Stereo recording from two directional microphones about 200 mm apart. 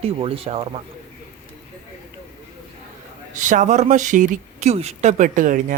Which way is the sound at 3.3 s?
40° right (ahead or behind).